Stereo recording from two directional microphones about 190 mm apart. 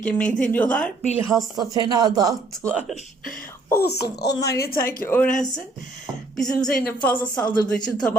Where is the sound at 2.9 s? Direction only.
45° left (ahead or behind).